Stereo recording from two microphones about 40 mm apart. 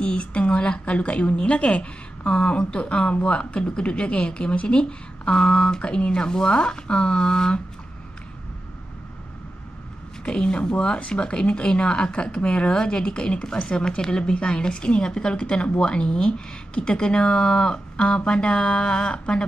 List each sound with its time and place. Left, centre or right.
0.0 s a woman's voice: left
10.2 s a woman's voice: left